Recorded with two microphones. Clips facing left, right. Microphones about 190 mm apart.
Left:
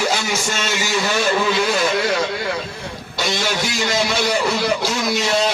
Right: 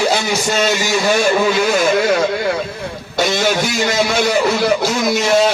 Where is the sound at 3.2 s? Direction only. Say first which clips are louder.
Right 6 dB; 50° right (ahead or behind).